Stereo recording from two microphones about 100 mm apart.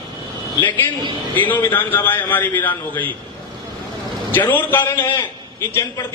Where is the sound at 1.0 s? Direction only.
55° right (ahead or behind).